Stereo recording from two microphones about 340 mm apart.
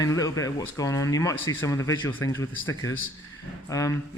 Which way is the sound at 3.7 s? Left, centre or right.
Centre.